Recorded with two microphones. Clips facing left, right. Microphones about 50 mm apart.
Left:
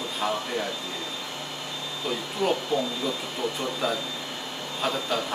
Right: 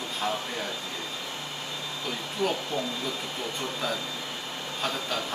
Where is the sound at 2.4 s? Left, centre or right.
Centre.